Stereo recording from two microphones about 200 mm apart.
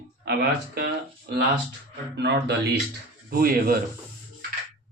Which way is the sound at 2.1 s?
60° right (ahead or behind).